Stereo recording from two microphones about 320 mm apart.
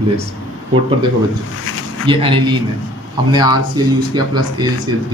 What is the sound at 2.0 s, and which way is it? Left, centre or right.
Speech, centre.